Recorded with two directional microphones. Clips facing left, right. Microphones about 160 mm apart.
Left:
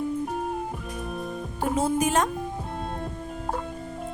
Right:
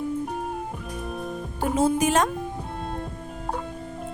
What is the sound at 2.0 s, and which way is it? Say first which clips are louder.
Speech: right 2 dB; 90° right.